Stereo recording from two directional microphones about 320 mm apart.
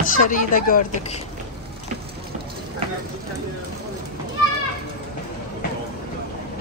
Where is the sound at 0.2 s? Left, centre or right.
Left.